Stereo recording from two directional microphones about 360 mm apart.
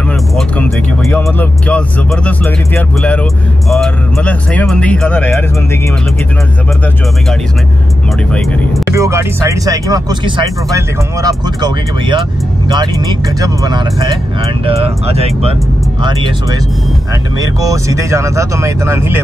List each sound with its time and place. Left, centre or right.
0.4 s speech: centre
8.3 s speech: centre
17.6 s speech: centre